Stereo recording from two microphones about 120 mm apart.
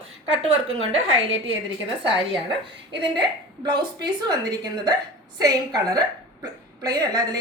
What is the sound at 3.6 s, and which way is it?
A woman's voice, 35° right (ahead or behind).